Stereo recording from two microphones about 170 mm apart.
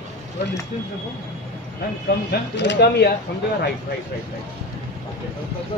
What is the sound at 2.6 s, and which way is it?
Speech, 80° left.